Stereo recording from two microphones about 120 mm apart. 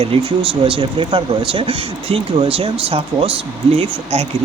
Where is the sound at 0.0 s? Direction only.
50° right (ahead or behind).